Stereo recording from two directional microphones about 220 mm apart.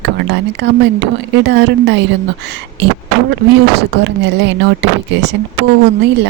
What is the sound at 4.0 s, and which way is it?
Speech, 55° right (ahead or behind).